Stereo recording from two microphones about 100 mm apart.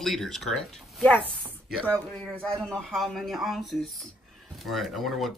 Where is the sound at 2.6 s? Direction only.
5° left (ahead or behind).